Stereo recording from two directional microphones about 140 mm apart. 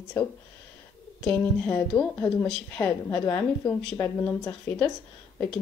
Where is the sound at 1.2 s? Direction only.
10° left (ahead or behind).